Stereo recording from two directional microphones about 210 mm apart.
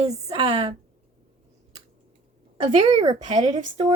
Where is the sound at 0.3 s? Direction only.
25° right (ahead or behind).